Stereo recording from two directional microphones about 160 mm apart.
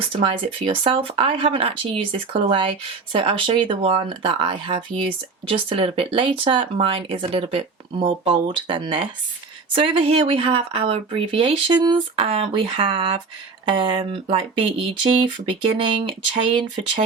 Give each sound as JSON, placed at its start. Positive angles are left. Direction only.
{"t": 0.2, "sound": "speech", "side_deg": -35}